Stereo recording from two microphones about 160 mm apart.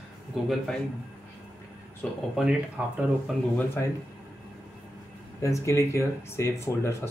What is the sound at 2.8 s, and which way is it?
Speech, 10° right (ahead or behind).